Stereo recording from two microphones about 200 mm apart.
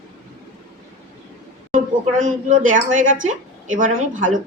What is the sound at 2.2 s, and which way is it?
A woman's voice, 40° right (ahead or behind).